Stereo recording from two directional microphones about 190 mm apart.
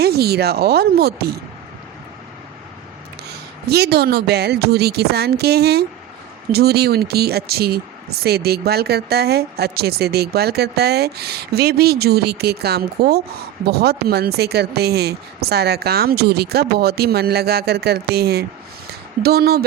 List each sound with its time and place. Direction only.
0.0 s speech: 55° right (ahead or behind)
3.2 s speech: 55° right (ahead or behind)
18.9 s a sound: 55° right (ahead or behind)